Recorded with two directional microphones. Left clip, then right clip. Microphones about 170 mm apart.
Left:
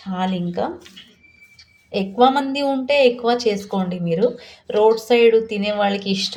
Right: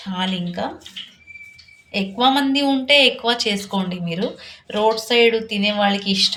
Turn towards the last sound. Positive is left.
turn(degrees=60)  # may be behind; listen again after turning